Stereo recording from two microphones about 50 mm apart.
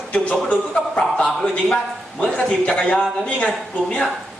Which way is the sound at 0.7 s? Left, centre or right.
Centre.